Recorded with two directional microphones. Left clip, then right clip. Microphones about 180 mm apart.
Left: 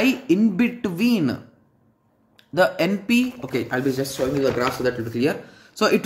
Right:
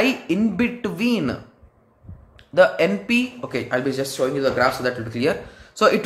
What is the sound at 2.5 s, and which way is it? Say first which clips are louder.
Speech: right 3 dB; 25° left (ahead or behind).